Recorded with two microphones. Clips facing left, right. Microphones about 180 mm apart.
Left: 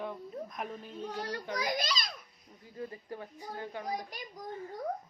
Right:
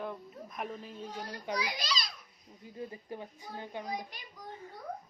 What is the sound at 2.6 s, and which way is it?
Speech, 20° right (ahead or behind).